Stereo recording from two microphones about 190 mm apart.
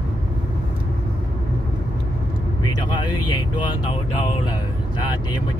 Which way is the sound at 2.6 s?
25° left (ahead or behind).